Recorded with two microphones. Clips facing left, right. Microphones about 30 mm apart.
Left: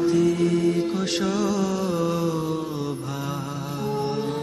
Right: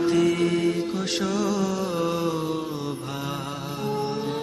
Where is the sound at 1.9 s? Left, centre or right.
Right.